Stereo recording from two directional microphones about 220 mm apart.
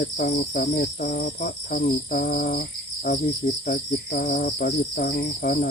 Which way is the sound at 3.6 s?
40° left (ahead or behind).